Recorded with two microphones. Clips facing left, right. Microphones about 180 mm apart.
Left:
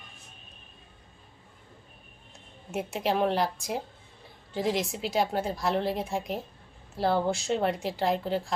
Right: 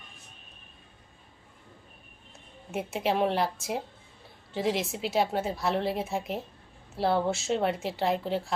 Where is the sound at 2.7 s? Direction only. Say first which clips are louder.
Even; centre (ahead or behind).